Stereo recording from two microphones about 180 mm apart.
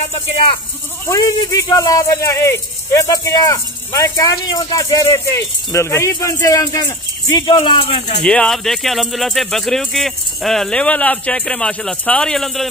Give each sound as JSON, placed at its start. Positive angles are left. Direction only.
{"t": 1.0, "sound": "speech", "side_deg": 20}
{"t": 8.2, "sound": "speech", "side_deg": 5}